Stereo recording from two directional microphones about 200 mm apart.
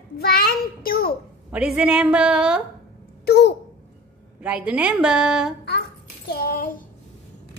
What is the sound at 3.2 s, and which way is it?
Speech, 55° left (ahead or behind).